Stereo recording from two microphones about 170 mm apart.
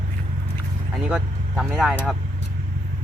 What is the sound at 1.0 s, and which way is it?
Speech, 5° right (ahead or behind).